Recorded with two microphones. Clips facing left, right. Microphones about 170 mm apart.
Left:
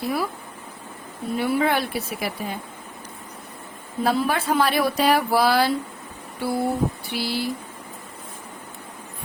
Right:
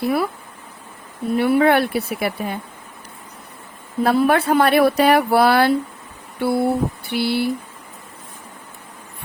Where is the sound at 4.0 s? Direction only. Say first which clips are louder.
Right 6 dB; 60° right (ahead or behind).